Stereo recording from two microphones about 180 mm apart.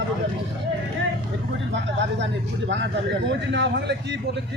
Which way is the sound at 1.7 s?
90° right.